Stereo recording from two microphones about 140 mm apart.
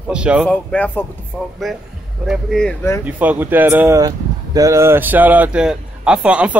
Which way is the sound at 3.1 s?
10° right (ahead or behind).